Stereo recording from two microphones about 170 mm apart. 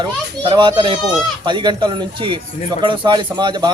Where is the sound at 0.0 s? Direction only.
30° right (ahead or behind).